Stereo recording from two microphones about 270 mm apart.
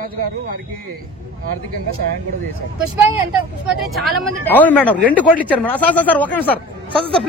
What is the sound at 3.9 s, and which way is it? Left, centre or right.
A man's voice, centre.